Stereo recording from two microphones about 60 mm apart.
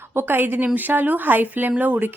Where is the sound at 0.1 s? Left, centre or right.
Right.